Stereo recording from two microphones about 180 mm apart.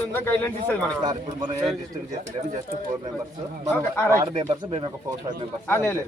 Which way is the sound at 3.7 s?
10° left (ahead or behind).